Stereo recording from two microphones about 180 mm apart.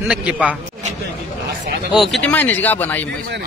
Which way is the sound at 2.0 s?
Centre (ahead or behind).